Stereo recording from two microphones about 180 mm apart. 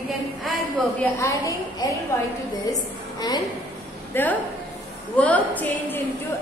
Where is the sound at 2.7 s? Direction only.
20° left (ahead or behind).